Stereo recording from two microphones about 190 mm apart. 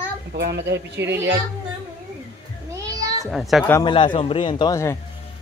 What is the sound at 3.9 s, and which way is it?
A man's voice, 25° left (ahead or behind).